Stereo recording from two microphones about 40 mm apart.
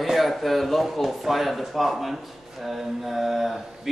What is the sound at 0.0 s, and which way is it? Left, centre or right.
Speech, centre.